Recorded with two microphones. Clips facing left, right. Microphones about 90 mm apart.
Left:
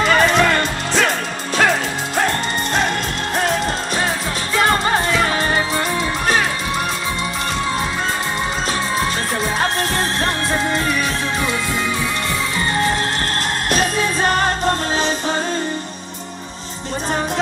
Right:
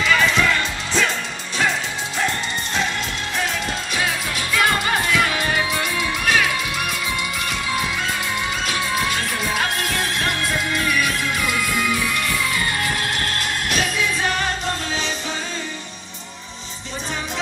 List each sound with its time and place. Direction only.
0.0 s music: 45° left (ahead or behind)
4.6 s music: 35° left (ahead or behind)
9.6 s music: 35° left (ahead or behind)
12.5 s music: 30° left (ahead or behind)